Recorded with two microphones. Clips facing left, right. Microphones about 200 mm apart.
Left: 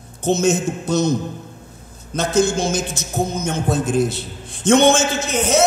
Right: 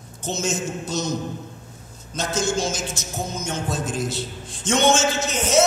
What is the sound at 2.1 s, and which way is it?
Speech, 60° left (ahead or behind).